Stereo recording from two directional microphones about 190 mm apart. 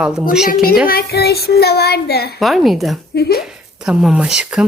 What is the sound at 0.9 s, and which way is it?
Child singing, 55° left (ahead or behind).